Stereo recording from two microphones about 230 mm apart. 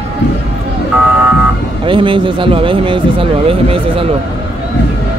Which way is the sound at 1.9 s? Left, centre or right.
Right.